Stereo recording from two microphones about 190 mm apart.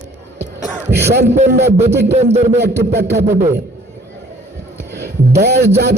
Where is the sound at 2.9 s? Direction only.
60° right (ahead or behind).